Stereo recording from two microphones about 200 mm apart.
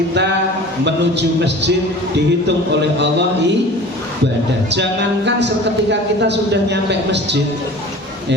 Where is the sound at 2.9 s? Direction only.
60° right (ahead or behind).